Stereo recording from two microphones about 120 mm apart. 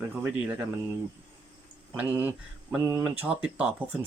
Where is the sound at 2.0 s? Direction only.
20° right (ahead or behind).